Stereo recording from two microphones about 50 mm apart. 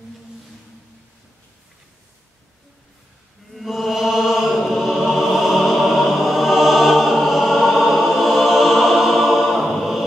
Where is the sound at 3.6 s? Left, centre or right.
Centre.